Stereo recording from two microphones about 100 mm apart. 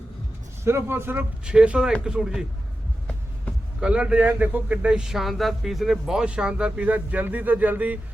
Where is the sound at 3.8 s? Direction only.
10° right (ahead or behind).